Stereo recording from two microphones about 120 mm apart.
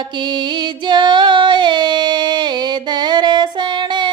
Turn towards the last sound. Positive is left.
turn(degrees=-40)  # may be behind; listen again after turning